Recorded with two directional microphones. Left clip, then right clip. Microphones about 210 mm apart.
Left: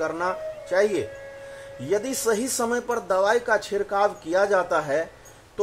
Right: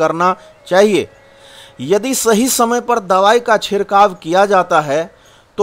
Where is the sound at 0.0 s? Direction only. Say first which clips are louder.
Right 12 dB; 35° right (ahead or behind).